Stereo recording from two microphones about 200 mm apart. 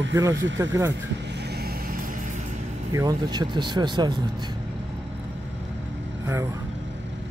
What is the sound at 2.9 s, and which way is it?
Speech, 20° right (ahead or behind).